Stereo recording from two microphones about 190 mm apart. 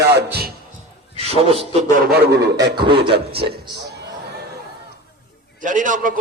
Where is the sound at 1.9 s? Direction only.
55° right (ahead or behind).